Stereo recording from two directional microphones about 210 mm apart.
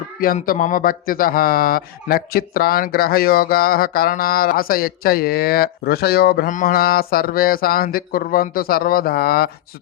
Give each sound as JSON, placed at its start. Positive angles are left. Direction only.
{"t": 0.2, "sound": "speech", "side_deg": 40}